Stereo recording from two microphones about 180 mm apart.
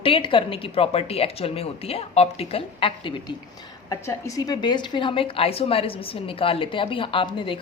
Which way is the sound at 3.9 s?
20° left (ahead or behind).